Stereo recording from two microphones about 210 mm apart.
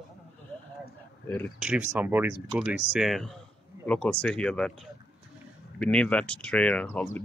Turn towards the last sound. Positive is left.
turn(degrees=5)  # may be behind; listen again after turning